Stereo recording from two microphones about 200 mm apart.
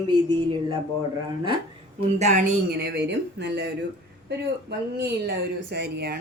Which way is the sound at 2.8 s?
60° right (ahead or behind).